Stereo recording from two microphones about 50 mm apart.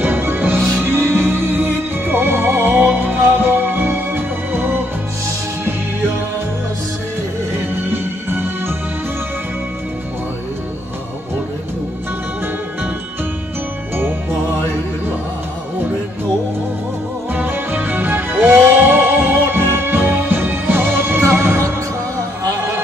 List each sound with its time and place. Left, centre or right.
0.0 s music: right
7.9 s music: right
17.5 s music: right